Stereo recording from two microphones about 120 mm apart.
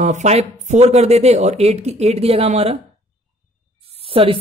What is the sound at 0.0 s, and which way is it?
Speech, 80° right.